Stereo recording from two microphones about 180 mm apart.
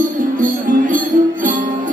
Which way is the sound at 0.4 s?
45° right (ahead or behind).